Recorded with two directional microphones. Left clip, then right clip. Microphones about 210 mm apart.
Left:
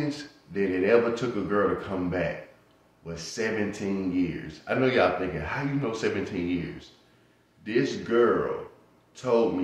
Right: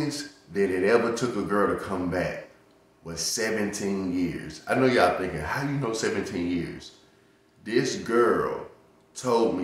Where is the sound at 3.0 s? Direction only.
10° right (ahead or behind).